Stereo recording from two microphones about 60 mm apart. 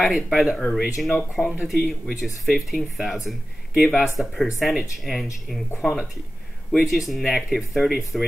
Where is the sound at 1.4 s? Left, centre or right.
Left.